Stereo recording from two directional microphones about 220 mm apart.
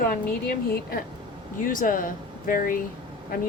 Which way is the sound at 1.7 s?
40° left (ahead or behind).